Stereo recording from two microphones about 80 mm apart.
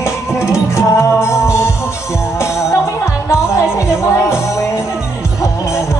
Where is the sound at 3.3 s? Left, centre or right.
Left.